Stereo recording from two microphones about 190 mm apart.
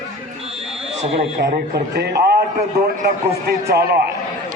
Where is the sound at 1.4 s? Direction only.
55° right (ahead or behind).